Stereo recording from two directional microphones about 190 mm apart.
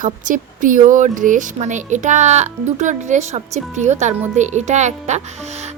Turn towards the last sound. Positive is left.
turn(degrees=-35)  # may be behind; listen again after turning